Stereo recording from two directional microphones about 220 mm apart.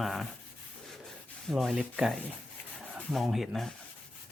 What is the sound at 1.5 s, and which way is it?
Speech, centre (ahead or behind).